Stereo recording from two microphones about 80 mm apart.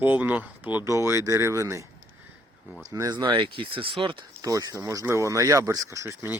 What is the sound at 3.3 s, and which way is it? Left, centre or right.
Speech, right.